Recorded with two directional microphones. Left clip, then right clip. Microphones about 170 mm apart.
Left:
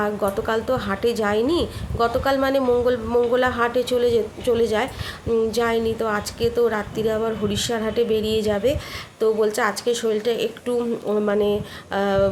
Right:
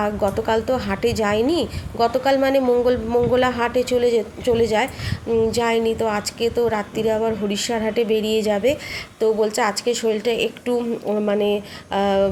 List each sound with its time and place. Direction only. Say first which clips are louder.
0.0 s a woman's voice: right 2 dB; 10° right (ahead or behind)
8.1 s a woman's voice: right 2 dB; 40° right (ahead or behind)
8.4 s a woman's voice: right 2 dB; 10° right (ahead or behind)